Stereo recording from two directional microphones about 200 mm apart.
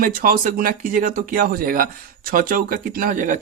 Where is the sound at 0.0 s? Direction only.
45° right (ahead or behind).